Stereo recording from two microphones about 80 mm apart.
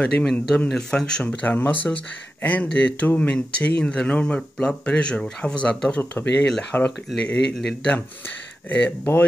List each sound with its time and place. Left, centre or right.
0.0 s speech: centre
8.6 s speech: left